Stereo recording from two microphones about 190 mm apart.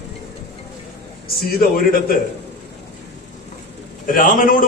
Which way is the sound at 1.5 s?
50° left (ahead or behind).